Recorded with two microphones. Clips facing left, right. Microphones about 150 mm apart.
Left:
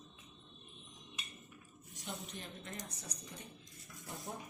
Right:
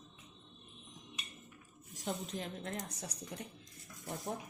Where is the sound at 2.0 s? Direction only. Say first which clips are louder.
Right 7 dB; 90° right.